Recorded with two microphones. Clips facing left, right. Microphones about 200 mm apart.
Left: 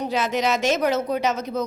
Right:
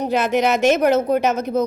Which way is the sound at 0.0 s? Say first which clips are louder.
Right 5 dB; 55° right (ahead or behind).